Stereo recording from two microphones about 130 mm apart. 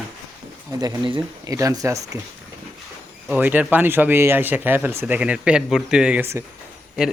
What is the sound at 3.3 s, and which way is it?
Speech, 15° right (ahead or behind).